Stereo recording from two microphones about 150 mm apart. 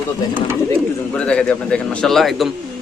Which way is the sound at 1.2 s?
5° left (ahead or behind).